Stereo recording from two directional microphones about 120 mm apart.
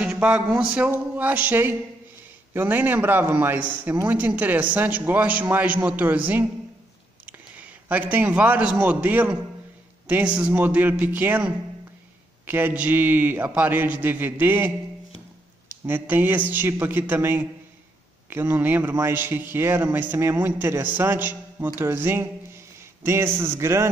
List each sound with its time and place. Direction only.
0.0 s a sound: 10° right (ahead or behind)
0.5 s a man's voice: 10° right (ahead or behind)
15.9 s a man's voice: 15° right (ahead or behind)